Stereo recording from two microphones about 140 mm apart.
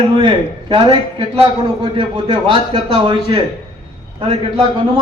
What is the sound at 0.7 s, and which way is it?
A man's voice, 40° right (ahead or behind).